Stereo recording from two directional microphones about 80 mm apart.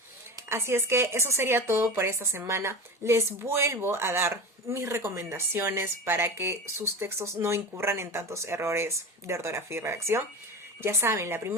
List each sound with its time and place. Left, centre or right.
0.4 s speech: right